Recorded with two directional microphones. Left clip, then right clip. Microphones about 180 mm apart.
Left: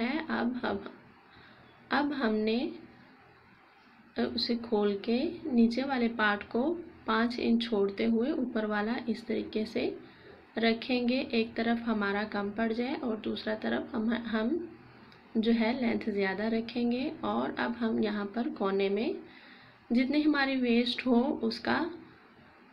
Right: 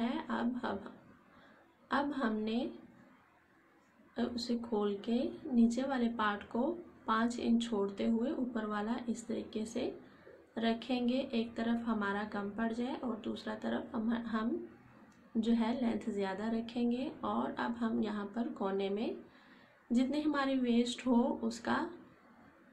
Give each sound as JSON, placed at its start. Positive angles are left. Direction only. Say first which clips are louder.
{"t": 0.0, "sound": "a sound", "louder": "left 5 dB", "side_deg": 5}
{"t": 1.9, "sound": "a woman's voice", "louder": "left 5 dB", "side_deg": 5}
{"t": 4.1, "sound": "a woman's voice", "louder": "left 6 dB", "side_deg": 5}